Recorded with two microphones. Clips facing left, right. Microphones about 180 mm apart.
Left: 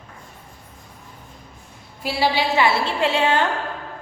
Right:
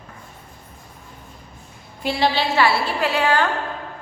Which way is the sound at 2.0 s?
5° left (ahead or behind).